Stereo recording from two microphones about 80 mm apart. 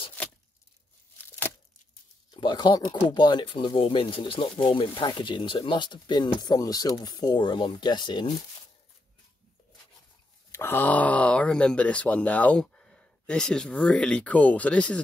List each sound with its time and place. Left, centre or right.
0.2 s tearing: left
2.3 s speech: left
10.5 s speech: left